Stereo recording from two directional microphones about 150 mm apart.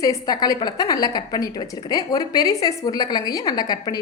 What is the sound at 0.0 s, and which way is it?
A woman's voice, 25° left (ahead or behind).